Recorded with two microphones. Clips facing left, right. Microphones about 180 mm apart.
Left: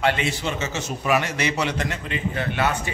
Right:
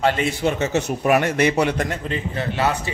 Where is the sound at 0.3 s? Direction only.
55° right (ahead or behind).